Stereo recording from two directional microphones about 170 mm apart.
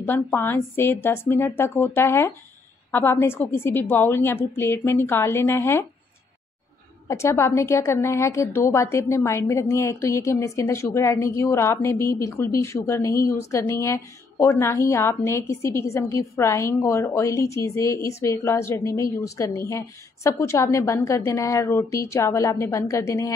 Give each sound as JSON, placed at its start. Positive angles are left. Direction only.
{"t": 0.0, "sound": "a woman's voice", "side_deg": 10}
{"t": 7.1, "sound": "a woman's voice", "side_deg": 15}